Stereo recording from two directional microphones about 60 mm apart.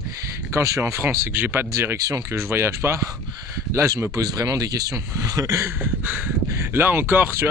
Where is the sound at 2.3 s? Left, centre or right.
Right.